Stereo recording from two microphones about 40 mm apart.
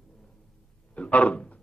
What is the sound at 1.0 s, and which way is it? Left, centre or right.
Speech, left.